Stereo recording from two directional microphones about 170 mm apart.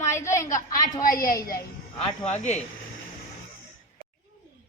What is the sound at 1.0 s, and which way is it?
Speech, 55° left (ahead or behind).